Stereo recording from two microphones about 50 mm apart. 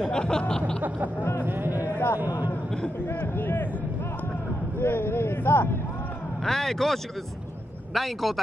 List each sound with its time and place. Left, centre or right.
0.1 s a sound: centre
0.8 s a man's voice: right
1.4 s music: right
2.1 s a man's voice: right
3.2 s a man's voice: left
4.7 s speech: left
6.4 s a sound: centre
7.9 s a man's voice: centre